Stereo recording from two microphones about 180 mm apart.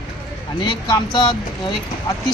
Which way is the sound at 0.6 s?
25° left (ahead or behind).